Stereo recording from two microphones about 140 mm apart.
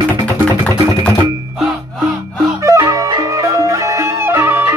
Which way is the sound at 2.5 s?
25° right (ahead or behind).